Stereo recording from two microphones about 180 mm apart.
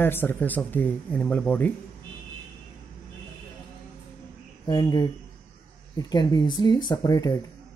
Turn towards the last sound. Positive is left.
turn(degrees=20)  # may be behind; listen again after turning